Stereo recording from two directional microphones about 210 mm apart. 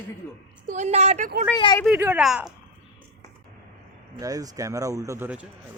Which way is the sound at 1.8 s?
10° right (ahead or behind).